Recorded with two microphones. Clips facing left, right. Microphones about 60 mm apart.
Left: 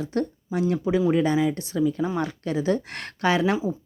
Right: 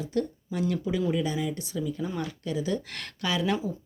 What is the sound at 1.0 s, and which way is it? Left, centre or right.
Speech, left.